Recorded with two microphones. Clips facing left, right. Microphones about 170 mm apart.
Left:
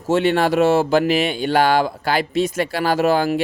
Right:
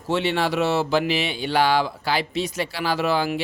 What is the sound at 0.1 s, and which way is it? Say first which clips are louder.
Speech: left 6 dB; 50° left (ahead or behind).